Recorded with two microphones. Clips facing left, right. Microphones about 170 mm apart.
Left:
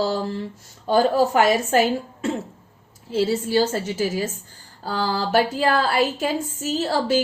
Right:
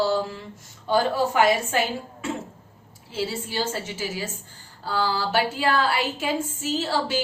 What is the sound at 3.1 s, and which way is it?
Speech, 40° left (ahead or behind).